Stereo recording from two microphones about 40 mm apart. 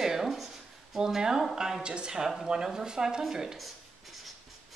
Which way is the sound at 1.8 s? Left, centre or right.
Right.